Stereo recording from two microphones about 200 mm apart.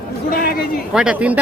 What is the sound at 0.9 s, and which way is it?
Speech, 5° right (ahead or behind).